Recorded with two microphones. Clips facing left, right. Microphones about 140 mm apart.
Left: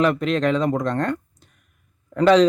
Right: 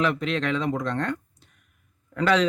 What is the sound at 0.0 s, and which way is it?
Speech, 50° left (ahead or behind).